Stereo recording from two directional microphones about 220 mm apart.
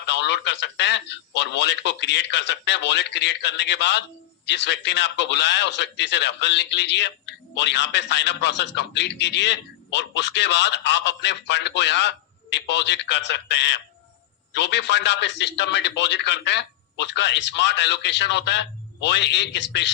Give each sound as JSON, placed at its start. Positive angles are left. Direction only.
{"t": 0.0, "sound": "a man's voice", "side_deg": 50}